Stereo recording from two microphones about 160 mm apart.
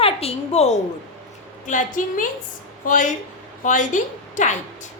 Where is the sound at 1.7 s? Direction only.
55° left (ahead or behind).